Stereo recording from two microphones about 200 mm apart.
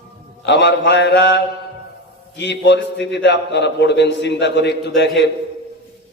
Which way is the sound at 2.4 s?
60° left (ahead or behind).